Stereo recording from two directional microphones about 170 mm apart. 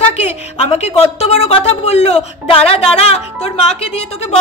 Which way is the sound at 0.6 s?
40° left (ahead or behind).